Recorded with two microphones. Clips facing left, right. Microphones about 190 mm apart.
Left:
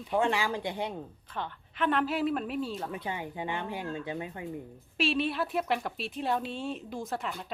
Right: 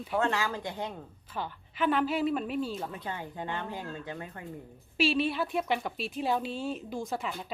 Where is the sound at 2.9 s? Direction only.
10° left (ahead or behind).